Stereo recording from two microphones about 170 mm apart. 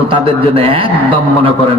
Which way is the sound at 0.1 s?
30° right (ahead or behind).